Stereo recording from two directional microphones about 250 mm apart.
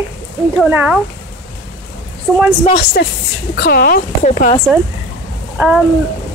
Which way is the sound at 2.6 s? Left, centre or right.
Left.